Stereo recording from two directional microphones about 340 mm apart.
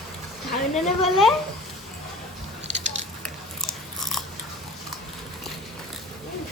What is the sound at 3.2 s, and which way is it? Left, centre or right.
Biting, centre.